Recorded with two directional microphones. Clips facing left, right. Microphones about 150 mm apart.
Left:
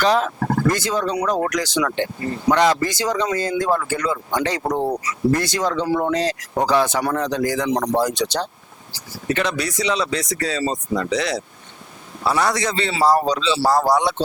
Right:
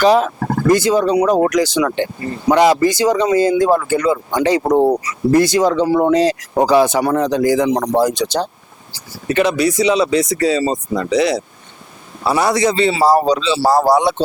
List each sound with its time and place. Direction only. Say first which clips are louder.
0.0 s speech: right 6 dB; 10° right (ahead or behind)
0.3 s speech: right 2 dB; 20° right (ahead or behind)
0.7 s speech: right 8 dB; 5° right (ahead or behind)